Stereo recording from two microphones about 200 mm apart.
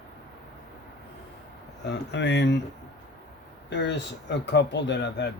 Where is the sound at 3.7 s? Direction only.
60° left (ahead or behind).